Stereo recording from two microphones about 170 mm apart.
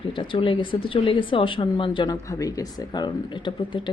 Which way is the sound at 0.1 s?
30° left (ahead or behind).